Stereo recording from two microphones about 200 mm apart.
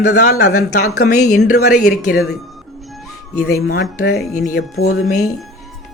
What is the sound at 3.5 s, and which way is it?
Speech, 55° left (ahead or behind).